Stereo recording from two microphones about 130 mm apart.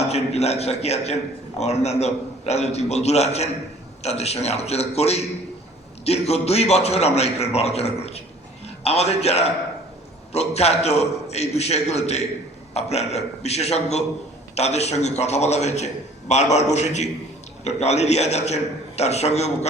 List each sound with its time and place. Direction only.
0.1 s a man's voice: 55° left (ahead or behind)